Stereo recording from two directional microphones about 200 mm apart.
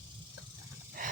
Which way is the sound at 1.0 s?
45° right (ahead or behind).